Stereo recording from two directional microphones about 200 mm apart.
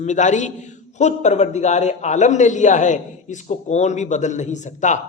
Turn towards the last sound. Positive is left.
turn(degrees=35)  # may be behind; listen again after turning